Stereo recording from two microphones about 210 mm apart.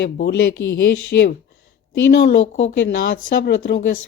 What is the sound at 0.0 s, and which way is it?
Speech, 55° left (ahead or behind).